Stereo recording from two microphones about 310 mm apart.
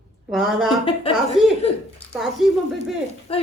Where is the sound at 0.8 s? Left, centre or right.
Centre.